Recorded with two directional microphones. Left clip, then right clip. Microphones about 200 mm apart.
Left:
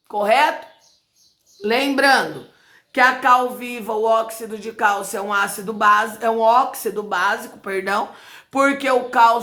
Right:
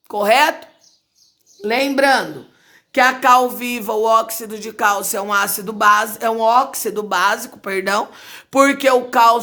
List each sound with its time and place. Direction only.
0.1 s speech: 50° right (ahead or behind)
1.6 s a woman's voice: 35° right (ahead or behind)
2.9 s speech: 45° right (ahead or behind)